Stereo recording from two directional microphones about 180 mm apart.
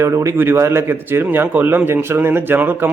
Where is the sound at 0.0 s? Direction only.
15° right (ahead or behind).